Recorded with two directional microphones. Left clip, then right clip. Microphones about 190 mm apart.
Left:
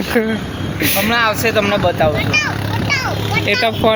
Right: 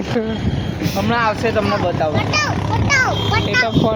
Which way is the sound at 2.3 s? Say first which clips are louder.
Left 1 dB; 35° right (ahead or behind).